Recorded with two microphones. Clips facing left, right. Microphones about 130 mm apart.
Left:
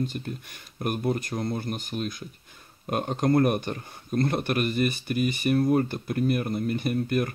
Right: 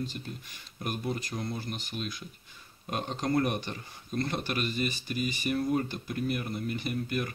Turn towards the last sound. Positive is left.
turn(degrees=50)  # may be behind; listen again after turning